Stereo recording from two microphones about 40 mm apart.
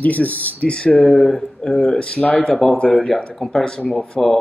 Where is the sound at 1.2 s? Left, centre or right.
Centre.